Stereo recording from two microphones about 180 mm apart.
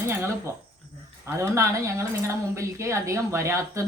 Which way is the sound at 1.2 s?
15° right (ahead or behind).